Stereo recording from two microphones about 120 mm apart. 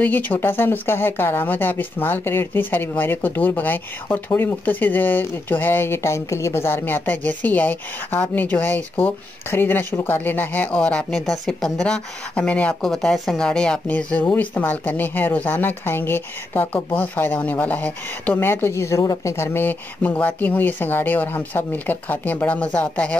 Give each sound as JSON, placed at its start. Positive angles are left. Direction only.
{"t": 0.0, "sound": "speech", "side_deg": 15}